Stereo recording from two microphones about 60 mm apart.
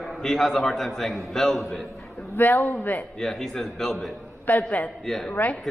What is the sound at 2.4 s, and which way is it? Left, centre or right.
Speech, left.